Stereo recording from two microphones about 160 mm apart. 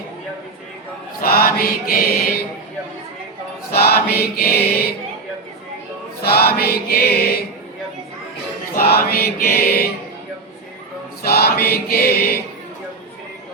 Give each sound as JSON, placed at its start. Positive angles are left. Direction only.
{"t": 1.2, "sound": "mantra", "side_deg": 70}
{"t": 3.7, "sound": "choir", "side_deg": 75}
{"t": 6.2, "sound": "choir", "side_deg": 75}
{"t": 8.8, "sound": "choir", "side_deg": 75}
{"t": 11.3, "sound": "choir", "side_deg": 80}